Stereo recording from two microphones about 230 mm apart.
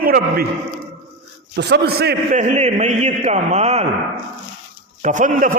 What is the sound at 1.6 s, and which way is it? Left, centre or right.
Speech, right.